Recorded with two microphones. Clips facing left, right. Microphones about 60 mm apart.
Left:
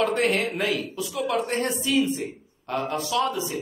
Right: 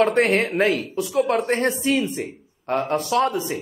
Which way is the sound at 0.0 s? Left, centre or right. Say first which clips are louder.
Right 5 dB; right.